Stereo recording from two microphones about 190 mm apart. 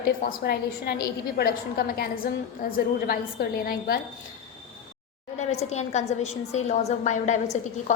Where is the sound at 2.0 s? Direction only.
50° left (ahead or behind).